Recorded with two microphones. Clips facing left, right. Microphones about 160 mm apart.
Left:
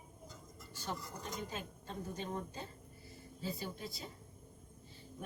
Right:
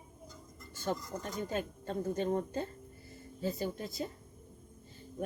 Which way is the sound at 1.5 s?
55° right (ahead or behind).